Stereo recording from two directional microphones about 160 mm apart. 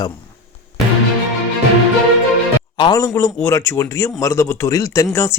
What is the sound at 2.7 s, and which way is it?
A man's voice, 25° left (ahead or behind).